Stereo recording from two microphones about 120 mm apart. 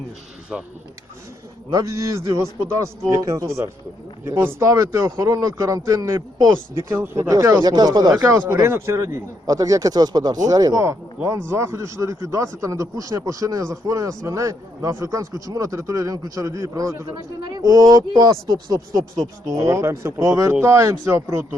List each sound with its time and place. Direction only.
0.5 s speech: 5° right (ahead or behind)
1.7 s speech: 25° right (ahead or behind)